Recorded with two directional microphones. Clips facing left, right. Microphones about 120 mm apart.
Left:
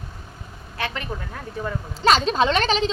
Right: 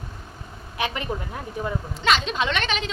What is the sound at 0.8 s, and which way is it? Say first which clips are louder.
Speech: right 2 dB; 15° right (ahead or behind).